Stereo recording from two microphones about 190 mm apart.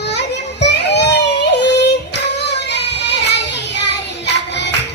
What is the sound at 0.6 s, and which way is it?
Child singing, 65° left (ahead or behind).